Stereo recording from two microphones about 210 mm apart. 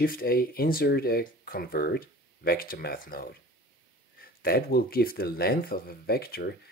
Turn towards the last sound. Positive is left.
turn(degrees=50)  # may be behind; listen again after turning